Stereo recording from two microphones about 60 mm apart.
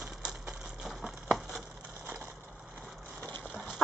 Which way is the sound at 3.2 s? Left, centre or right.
Left.